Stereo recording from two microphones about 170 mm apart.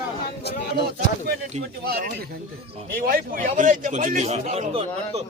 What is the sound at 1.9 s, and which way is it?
A man's voice, 65° right (ahead or behind).